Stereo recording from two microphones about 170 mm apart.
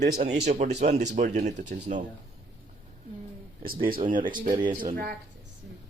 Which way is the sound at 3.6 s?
55° right (ahead or behind).